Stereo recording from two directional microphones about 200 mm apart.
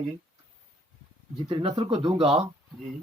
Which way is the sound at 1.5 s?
25° right (ahead or behind).